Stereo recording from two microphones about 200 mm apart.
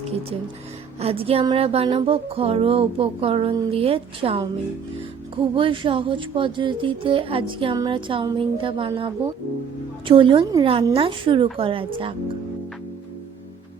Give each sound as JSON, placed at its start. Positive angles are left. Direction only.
{"t": 0.0, "sound": "speech", "side_deg": -30}
{"t": 5.5, "sound": "speech", "side_deg": -25}